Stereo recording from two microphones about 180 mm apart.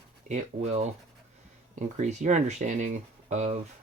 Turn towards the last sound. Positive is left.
turn(degrees=-40)  # may be behind; listen again after turning